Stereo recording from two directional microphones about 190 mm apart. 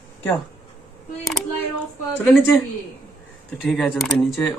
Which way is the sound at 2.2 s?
10° left (ahead or behind).